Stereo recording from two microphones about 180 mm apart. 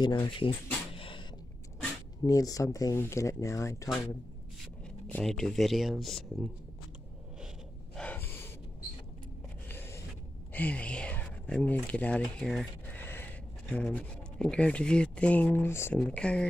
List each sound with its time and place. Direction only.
0.0 s speech: 25° left (ahead or behind)
0.9 s a sound: 30° left (ahead or behind)
2.2 s speech: 20° left (ahead or behind)
5.1 s speech: 5° left (ahead or behind)
7.9 s gasp: 5° left (ahead or behind)
9.7 s a sound: 15° left (ahead or behind)
10.5 s speech: 10° left (ahead or behind)